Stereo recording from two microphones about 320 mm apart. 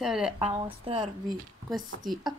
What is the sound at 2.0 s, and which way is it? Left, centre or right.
Speech, centre.